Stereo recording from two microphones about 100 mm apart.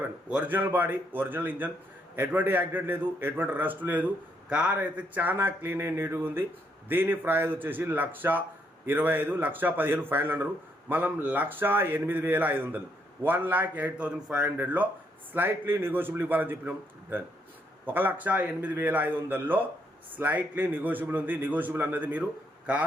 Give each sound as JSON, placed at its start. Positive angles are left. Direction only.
{"t": 0.3, "sound": "a man's voice", "side_deg": -15}